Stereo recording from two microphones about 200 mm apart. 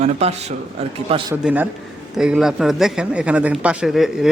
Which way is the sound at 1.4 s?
5° right (ahead or behind).